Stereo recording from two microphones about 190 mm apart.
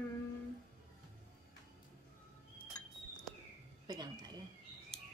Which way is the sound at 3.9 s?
20° right (ahead or behind).